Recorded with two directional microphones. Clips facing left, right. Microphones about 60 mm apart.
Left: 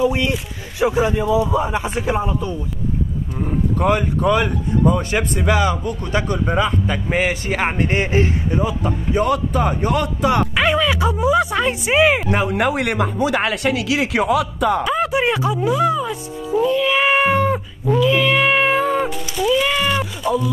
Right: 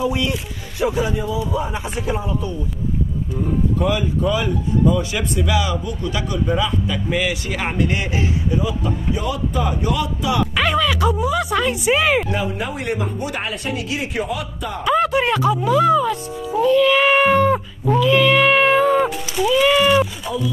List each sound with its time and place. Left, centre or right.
0.7 s speech: left
1.1 s speech: left
3.7 s speech: left
4.9 s a man's voice: left
10.5 s speech: left
12.5 s speech: left
14.9 s speech: centre